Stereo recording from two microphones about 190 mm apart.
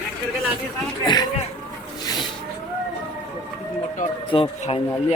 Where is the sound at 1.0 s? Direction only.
20° left (ahead or behind).